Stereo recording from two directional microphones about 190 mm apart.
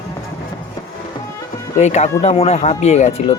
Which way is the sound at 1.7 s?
35° left (ahead or behind).